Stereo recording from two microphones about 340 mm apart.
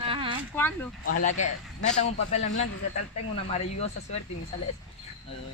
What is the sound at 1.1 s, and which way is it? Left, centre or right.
Speech, left.